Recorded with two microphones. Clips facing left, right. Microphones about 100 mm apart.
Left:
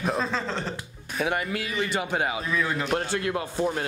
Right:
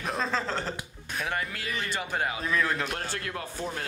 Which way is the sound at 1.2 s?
10° left (ahead or behind).